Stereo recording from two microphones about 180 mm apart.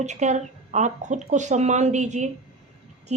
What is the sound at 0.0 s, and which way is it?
A woman's voice, 40° right (ahead or behind).